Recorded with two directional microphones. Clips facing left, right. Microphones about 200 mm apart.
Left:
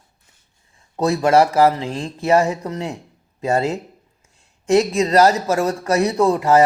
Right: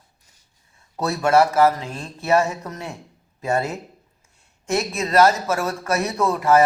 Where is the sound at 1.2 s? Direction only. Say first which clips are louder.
Left 1 dB; 30° left (ahead or behind).